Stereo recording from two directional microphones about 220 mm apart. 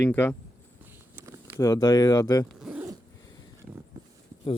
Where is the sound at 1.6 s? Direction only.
15° left (ahead or behind).